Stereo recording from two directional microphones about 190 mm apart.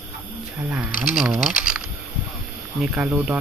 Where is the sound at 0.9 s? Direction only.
45° left (ahead or behind).